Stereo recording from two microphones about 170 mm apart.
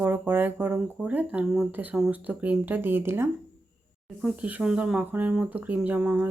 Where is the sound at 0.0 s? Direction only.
10° right (ahead or behind).